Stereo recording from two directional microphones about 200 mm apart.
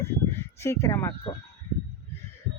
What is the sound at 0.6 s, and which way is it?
Speech, 15° left (ahead or behind).